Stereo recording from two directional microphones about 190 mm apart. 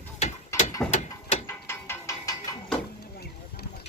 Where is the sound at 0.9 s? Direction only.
35° left (ahead or behind).